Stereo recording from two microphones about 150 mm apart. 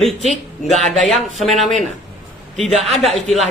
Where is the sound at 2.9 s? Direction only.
45° left (ahead or behind).